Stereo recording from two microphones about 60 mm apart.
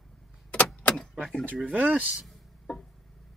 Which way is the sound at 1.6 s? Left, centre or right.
Right.